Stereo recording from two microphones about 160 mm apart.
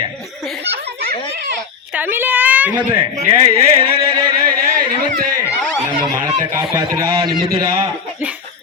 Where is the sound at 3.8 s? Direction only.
35° right (ahead or behind).